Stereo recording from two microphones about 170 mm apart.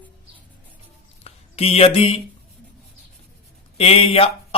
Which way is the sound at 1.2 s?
35° left (ahead or behind).